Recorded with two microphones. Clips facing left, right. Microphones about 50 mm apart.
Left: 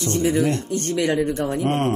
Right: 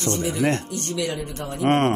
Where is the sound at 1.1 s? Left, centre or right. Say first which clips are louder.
Left 9 dB; left.